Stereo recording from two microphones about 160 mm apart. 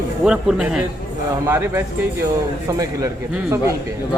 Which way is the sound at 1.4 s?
15° right (ahead or behind).